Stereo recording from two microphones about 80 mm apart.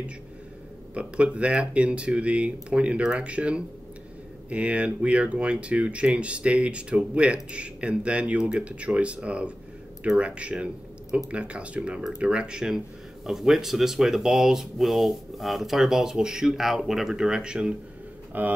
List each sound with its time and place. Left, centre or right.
0.9 s speech: centre
18.3 s speech: right